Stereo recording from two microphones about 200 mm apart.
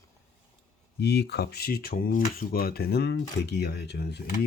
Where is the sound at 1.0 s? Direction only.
55° left (ahead or behind).